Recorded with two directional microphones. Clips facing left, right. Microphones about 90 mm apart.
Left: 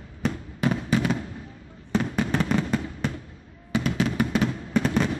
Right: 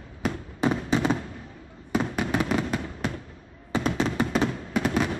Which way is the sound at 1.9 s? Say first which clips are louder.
Left 1 dB; 10° right (ahead or behind).